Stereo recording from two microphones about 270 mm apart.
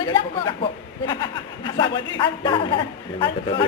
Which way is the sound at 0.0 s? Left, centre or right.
Centre.